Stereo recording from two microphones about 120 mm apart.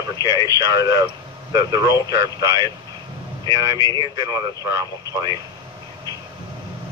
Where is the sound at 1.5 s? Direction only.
30° right (ahead or behind).